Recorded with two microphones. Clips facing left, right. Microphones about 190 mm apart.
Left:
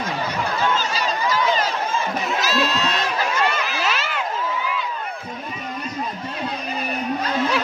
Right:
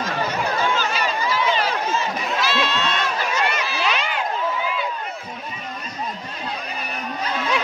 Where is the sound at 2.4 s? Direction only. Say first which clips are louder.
Even; 40° left (ahead or behind).